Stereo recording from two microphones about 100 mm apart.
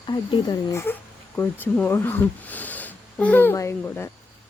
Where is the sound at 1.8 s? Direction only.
20° left (ahead or behind).